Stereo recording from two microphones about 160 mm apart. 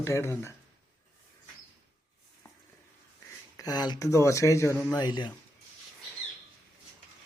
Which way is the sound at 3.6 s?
25° left (ahead or behind).